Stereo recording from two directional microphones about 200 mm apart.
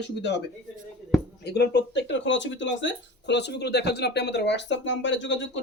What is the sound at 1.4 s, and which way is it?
Speech, 55° left (ahead or behind).